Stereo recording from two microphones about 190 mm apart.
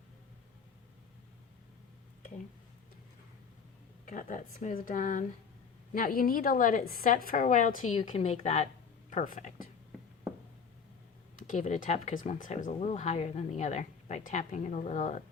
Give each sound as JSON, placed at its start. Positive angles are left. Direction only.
{"t": 4.0, "sound": "a woman's voice", "side_deg": 45}
{"t": 11.3, "sound": "speech", "side_deg": 40}